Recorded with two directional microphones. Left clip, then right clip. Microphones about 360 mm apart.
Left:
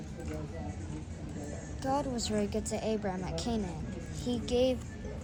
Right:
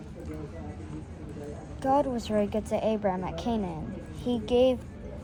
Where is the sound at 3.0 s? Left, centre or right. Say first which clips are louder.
Right 8 dB; right.